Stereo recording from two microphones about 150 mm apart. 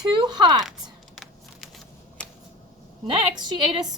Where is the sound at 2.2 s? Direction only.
10° left (ahead or behind).